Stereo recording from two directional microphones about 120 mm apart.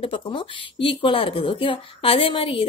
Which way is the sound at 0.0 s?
45° left (ahead or behind).